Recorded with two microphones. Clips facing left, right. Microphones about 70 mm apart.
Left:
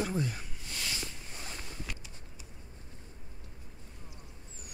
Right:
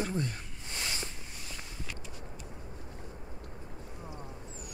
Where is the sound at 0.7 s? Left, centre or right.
Right.